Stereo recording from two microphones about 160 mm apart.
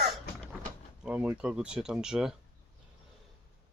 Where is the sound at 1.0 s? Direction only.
10° right (ahead or behind).